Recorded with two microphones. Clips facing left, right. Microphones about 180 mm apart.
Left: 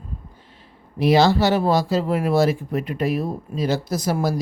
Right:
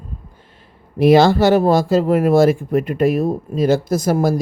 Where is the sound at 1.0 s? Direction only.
50° right (ahead or behind).